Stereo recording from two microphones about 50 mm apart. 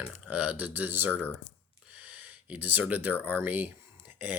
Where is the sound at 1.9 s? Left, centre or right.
Right.